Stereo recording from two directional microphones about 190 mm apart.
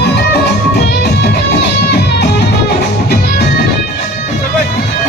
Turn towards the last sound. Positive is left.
turn(degrees=55)  # may be behind; listen again after turning